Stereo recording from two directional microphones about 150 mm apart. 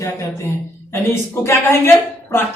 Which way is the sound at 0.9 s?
20° left (ahead or behind).